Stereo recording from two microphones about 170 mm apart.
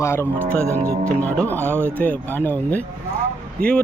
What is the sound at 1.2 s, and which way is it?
Speech, 10° left (ahead or behind).